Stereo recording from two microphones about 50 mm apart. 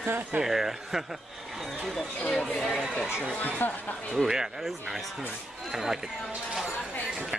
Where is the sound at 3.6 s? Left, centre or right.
Left.